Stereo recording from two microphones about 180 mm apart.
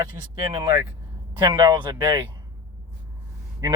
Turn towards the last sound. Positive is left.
turn(degrees=-20)  # may be behind; listen again after turning